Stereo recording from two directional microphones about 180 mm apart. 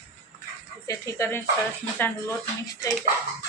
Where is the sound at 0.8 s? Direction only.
15° left (ahead or behind).